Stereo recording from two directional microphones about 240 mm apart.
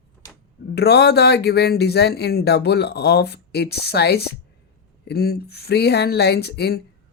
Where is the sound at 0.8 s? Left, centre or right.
Left.